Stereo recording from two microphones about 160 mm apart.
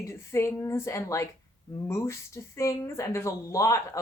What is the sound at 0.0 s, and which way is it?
A woman's voice, 15° left (ahead or behind).